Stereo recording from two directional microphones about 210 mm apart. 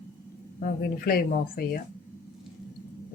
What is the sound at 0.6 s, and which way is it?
A woman's voice, 45° left (ahead or behind).